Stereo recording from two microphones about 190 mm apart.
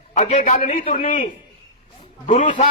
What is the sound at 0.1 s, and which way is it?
A man's voice, 40° left (ahead or behind).